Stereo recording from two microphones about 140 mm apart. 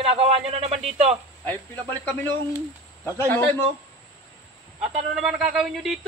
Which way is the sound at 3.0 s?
15° left (ahead or behind).